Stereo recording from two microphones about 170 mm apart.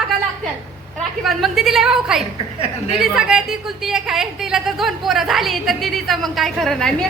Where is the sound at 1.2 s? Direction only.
Centre (ahead or behind).